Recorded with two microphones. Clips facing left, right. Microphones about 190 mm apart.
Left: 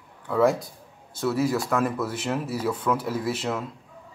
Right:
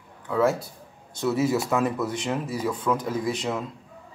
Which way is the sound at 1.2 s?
Centre (ahead or behind).